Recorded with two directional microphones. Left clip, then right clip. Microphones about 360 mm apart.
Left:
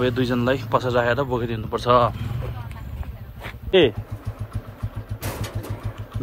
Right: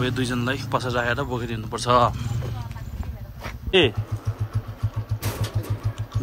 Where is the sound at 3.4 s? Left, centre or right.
Centre.